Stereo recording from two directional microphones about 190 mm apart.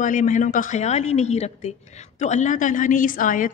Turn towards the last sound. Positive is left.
turn(degrees=45)  # may be behind; listen again after turning